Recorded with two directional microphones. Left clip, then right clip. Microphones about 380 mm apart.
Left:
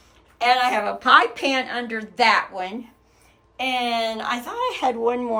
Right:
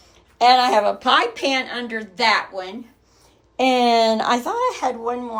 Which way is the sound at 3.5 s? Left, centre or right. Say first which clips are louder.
Right 7 dB; centre.